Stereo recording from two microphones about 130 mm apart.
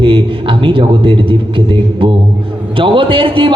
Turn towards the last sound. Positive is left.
turn(degrees=-40)  # may be behind; listen again after turning